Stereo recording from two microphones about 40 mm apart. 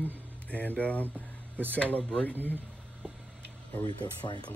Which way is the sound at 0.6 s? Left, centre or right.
Left.